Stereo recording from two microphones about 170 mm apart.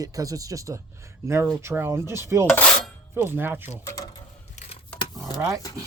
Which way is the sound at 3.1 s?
15° right (ahead or behind).